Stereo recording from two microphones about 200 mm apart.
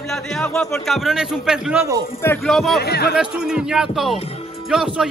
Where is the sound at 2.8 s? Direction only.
55° left (ahead or behind).